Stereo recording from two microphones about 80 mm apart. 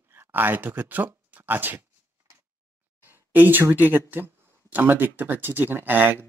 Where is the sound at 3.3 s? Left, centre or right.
Right.